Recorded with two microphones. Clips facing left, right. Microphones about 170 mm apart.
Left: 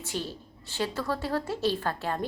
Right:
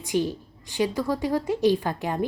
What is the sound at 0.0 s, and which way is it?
Speech, 15° right (ahead or behind).